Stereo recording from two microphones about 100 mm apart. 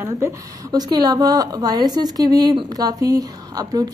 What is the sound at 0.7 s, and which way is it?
A woman's voice, 45° right (ahead or behind).